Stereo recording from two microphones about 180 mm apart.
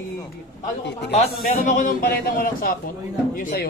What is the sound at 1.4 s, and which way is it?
A man's voice, 50° left (ahead or behind).